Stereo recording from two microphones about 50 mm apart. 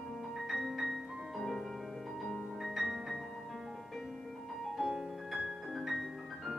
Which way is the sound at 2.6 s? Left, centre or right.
Centre.